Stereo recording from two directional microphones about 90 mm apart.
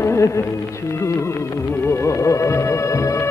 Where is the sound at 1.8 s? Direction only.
35° left (ahead or behind).